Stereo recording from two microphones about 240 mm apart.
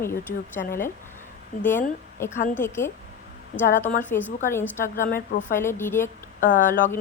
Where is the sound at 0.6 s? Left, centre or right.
Left.